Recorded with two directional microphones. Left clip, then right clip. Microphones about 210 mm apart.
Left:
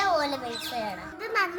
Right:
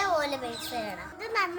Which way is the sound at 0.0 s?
15° right (ahead or behind).